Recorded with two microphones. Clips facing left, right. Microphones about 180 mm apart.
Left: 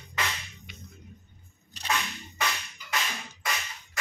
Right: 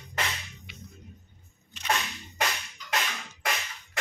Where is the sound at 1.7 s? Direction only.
35° left (ahead or behind).